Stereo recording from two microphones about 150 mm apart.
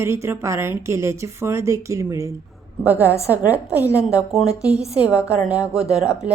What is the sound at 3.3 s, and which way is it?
Speech, 10° right (ahead or behind).